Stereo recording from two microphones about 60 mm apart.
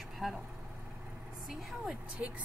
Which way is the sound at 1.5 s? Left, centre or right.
Centre.